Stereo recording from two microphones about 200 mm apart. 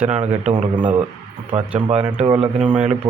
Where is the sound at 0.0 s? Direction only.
35° right (ahead or behind).